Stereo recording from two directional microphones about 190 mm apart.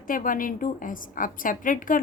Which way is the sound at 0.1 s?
45° left (ahead or behind).